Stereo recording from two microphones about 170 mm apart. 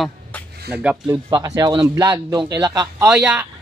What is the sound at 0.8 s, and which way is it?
Speech, 5° right (ahead or behind).